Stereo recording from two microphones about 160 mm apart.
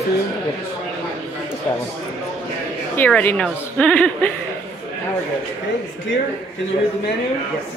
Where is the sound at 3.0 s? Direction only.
10° left (ahead or behind).